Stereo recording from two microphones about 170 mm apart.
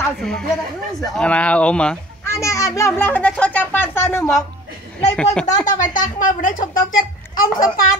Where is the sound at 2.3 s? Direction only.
20° left (ahead or behind).